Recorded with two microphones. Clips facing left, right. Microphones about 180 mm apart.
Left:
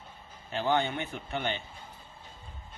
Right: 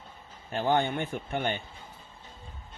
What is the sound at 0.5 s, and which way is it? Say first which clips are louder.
Speech: right 2 dB; 50° right (ahead or behind).